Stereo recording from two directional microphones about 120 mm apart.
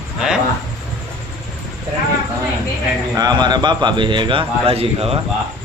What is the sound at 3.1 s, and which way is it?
A man's voice, 35° right (ahead or behind).